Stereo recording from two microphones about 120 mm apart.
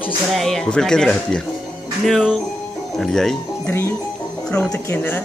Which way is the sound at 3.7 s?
20° left (ahead or behind).